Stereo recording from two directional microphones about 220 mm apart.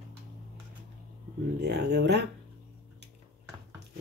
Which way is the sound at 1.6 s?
50° right (ahead or behind).